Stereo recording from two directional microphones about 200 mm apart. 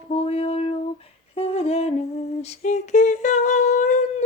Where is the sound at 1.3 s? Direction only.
30° left (ahead or behind).